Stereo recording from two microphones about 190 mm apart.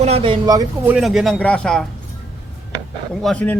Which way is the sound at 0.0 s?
30° right (ahead or behind).